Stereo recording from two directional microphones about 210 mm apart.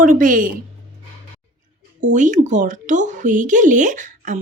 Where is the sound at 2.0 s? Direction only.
35° right (ahead or behind).